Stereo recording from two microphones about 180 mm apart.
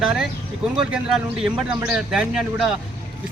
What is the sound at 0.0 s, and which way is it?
A man's voice, centre (ahead or behind).